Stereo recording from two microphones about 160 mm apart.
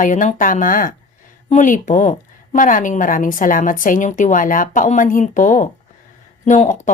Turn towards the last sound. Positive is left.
turn(degrees=50)  # may be behind; listen again after turning